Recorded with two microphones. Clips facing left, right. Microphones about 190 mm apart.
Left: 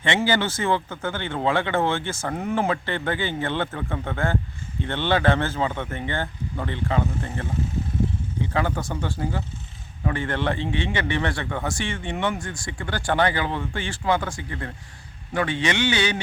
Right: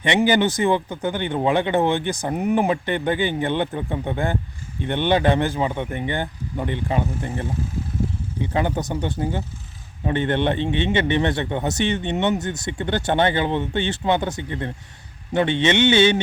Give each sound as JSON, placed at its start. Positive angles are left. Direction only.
{"t": 0.0, "sound": "speech", "side_deg": -15}
{"t": 8.5, "sound": "a man's voice", "side_deg": -20}